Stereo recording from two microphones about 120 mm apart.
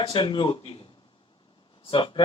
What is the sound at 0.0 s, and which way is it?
A man's voice, 45° left (ahead or behind).